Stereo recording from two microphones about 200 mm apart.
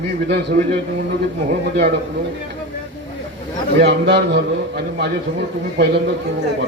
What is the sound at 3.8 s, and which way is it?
A man's voice, 55° right (ahead or behind).